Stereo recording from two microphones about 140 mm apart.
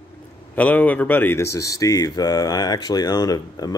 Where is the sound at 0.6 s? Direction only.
10° left (ahead or behind).